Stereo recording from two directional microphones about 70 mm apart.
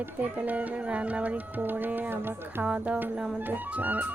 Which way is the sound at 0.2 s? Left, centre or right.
Right.